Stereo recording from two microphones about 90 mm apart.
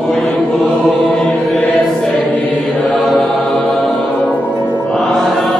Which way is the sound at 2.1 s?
15° left (ahead or behind).